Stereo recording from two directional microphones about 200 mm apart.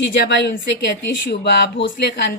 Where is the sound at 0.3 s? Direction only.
65° left (ahead or behind).